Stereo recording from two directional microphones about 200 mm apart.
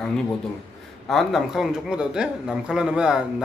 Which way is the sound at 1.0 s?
Centre (ahead or behind).